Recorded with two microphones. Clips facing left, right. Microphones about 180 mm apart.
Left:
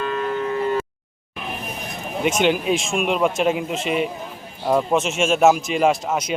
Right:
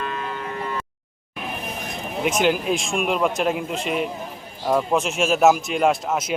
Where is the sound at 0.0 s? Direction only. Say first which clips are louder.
Left 6 dB; 35° left (ahead or behind).